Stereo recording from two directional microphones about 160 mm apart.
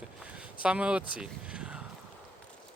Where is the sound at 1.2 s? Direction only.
5° right (ahead or behind).